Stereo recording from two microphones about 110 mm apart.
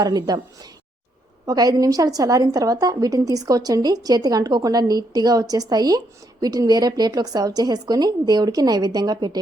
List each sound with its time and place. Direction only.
0.0 s a woman's voice: 35° right (ahead or behind)